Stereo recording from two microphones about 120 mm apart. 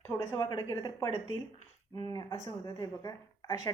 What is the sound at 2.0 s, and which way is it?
A woman's voice, 30° left (ahead or behind).